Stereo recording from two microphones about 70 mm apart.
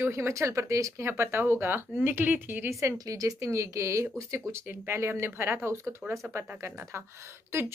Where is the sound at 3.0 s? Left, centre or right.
Right.